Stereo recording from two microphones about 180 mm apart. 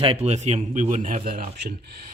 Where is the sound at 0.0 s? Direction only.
35° right (ahead or behind).